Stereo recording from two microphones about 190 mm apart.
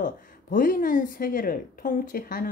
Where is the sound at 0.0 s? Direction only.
45° left (ahead or behind).